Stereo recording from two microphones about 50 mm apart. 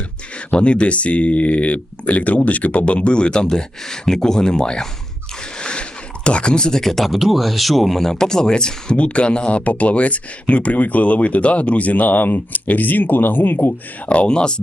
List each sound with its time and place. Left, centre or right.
0.3 s speech: left
14.1 s speech: left